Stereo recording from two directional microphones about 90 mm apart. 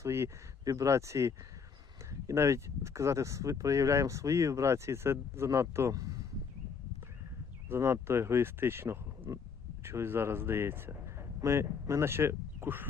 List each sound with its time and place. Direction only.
0.0 s speech: 30° right (ahead or behind)
0.6 s speech: 40° right (ahead or behind)
5.9 s speech: 40° right (ahead or behind)
7.7 s speech: 30° right (ahead or behind)